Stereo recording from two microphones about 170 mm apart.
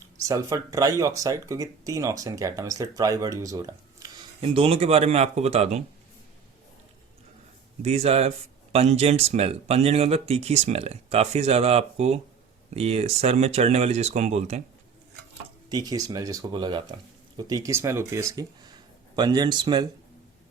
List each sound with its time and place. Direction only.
0.2 s speech: 20° right (ahead or behind)
4.4 s speech: 35° right (ahead or behind)
7.8 s speech: 35° right (ahead or behind)
15.7 s speech: 20° right (ahead or behind)